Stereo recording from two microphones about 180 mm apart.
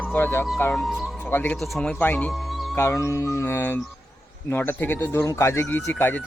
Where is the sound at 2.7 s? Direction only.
15° left (ahead or behind).